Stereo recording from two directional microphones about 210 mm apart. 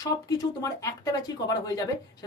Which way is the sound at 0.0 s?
15° left (ahead or behind).